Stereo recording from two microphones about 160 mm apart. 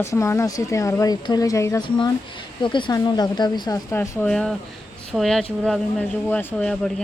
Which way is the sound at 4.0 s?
5° left (ahead or behind).